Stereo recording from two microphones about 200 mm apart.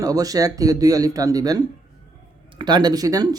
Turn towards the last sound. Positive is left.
turn(degrees=-20)  # may be behind; listen again after turning